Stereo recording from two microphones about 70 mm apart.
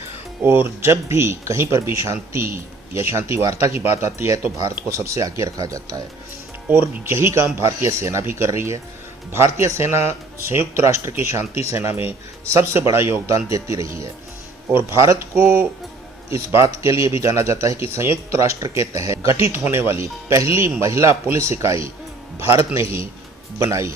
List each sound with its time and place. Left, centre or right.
0.4 s speech: right
6.7 s speech: right
13.3 s speech: right
15.4 s speech: right
19.6 s speech: right